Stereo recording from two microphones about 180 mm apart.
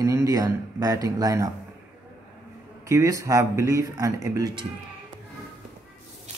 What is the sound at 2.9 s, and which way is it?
Speech, 20° right (ahead or behind).